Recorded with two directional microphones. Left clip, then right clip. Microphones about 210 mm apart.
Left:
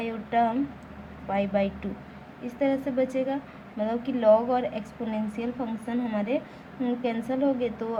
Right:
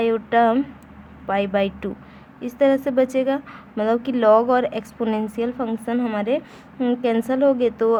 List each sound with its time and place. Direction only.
0.0 s a woman's voice: 50° right (ahead or behind)